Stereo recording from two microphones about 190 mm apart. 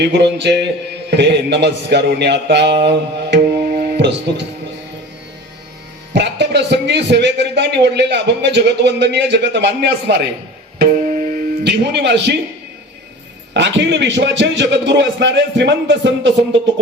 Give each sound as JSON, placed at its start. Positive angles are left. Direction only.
{"t": 0.0, "sound": "a man's voice", "side_deg": -65}
{"t": 2.8, "sound": "music", "side_deg": -60}
{"t": 6.1, "sound": "a man's voice", "side_deg": -60}
{"t": 10.8, "sound": "music", "side_deg": -45}
{"t": 11.6, "sound": "a man's voice", "side_deg": -65}
{"t": 13.5, "sound": "a man's voice", "side_deg": -70}